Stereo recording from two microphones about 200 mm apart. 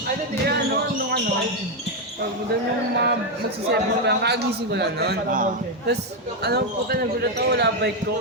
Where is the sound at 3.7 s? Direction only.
55° right (ahead or behind).